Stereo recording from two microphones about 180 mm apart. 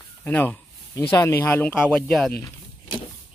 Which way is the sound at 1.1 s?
15° left (ahead or behind).